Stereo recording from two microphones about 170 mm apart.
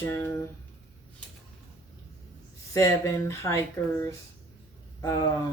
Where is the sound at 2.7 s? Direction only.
20° left (ahead or behind).